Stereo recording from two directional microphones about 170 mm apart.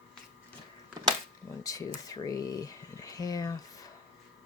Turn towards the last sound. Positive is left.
turn(degrees=20)  # may be behind; listen again after turning